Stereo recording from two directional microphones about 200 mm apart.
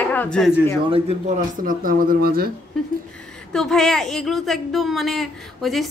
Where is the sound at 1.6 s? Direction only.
45° right (ahead or behind).